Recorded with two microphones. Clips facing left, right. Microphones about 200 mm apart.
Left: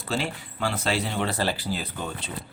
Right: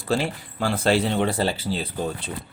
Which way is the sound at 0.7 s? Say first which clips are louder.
Right 8 dB; 55° right (ahead or behind).